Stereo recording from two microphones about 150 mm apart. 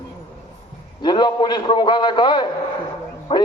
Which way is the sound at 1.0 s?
30° left (ahead or behind).